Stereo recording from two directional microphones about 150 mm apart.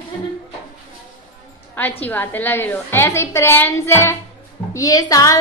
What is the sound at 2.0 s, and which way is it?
A woman's voice, 10° left (ahead or behind).